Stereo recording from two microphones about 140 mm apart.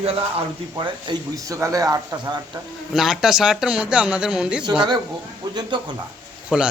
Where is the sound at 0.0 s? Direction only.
45° right (ahead or behind).